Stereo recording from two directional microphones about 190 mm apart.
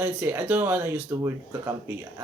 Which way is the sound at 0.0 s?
10° right (ahead or behind).